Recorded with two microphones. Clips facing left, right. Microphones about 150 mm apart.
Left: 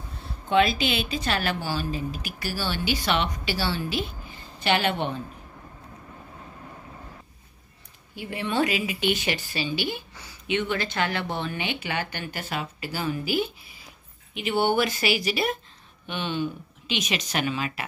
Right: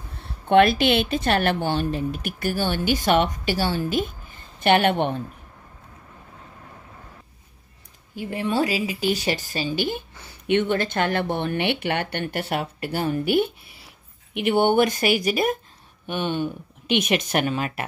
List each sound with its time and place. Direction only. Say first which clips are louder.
0.2 s a woman's voice: right 5 dB; 60° right (ahead or behind)
8.2 s a woman's voice: right 2 dB; 40° right (ahead or behind)